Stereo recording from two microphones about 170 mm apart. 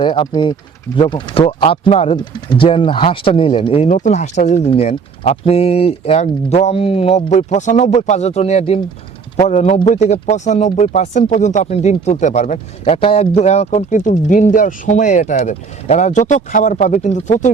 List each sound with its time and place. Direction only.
0.0 s speech: 30° left (ahead or behind); by 17.5 s 45° left (ahead or behind)